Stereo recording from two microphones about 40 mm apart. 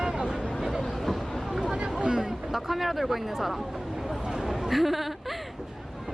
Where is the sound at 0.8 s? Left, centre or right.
Centre.